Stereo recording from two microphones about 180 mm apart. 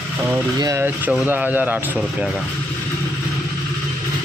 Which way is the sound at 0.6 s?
15° right (ahead or behind).